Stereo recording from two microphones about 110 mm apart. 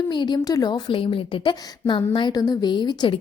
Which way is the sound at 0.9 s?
55° left (ahead or behind).